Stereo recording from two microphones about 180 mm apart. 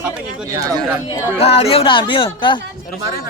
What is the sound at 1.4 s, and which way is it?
Speech, 35° left (ahead or behind).